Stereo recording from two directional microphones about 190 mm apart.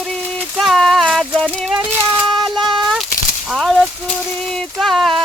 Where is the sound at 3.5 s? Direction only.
Centre (ahead or behind).